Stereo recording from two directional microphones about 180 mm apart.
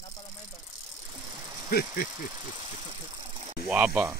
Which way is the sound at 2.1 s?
20° right (ahead or behind).